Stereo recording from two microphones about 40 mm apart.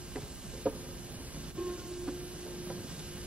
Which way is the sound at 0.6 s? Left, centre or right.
Right.